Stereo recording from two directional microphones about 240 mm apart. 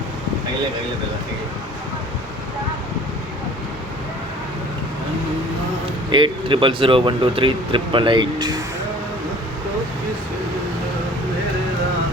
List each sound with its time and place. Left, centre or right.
6.1 s speech: centre